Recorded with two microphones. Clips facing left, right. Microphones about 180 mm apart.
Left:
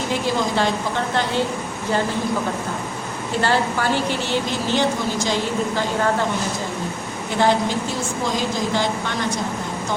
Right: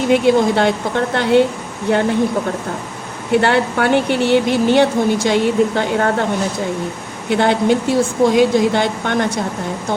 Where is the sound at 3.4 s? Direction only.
65° right (ahead or behind).